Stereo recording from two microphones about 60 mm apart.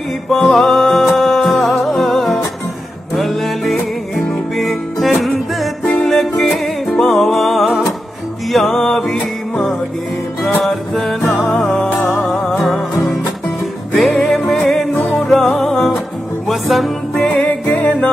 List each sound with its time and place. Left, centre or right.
0.3 s music: centre
17.1 s music: centre